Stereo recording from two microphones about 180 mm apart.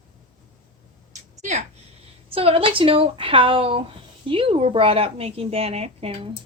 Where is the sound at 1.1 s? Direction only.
40° right (ahead or behind).